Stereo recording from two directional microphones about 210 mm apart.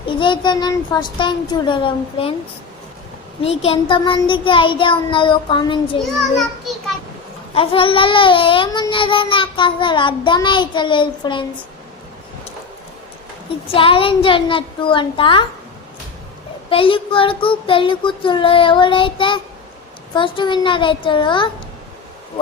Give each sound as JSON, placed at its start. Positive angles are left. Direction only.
{"t": 0.1, "sound": "child singing", "side_deg": 20}
{"t": 3.6, "sound": "child singing", "side_deg": 25}
{"t": 6.0, "sound": "a child's voice", "side_deg": 0}
{"t": 7.5, "sound": "child singing", "side_deg": 25}
{"t": 13.7, "sound": "child singing", "side_deg": 25}
{"t": 16.6, "sound": "child singing", "side_deg": 25}